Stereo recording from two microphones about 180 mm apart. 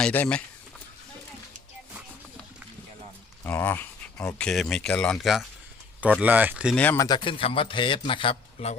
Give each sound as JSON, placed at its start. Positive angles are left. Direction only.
{"t": 0.0, "sound": "speech", "side_deg": 10}
{"t": 3.4, "sound": "speech", "side_deg": 10}
{"t": 6.7, "sound": "speech", "side_deg": 15}
{"t": 7.3, "sound": "a man's voice", "side_deg": 30}